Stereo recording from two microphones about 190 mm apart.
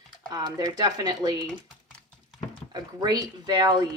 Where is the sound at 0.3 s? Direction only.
20° right (ahead or behind).